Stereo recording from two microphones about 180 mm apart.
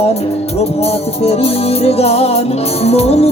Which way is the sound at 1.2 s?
35° left (ahead or behind).